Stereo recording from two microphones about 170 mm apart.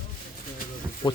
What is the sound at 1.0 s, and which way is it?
Speech, 25° left (ahead or behind).